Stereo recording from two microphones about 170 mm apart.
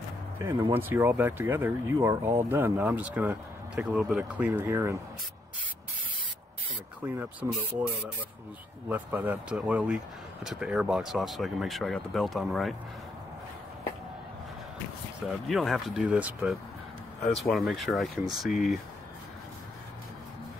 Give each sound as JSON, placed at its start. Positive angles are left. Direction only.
{"t": 0.4, "sound": "speech", "side_deg": -20}
{"t": 7.0, "sound": "speech", "side_deg": -10}
{"t": 8.8, "sound": "speech", "side_deg": -10}
{"t": 15.4, "sound": "speech", "side_deg": 0}